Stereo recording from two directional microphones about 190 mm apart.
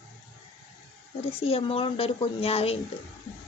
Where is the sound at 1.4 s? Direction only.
30° left (ahead or behind).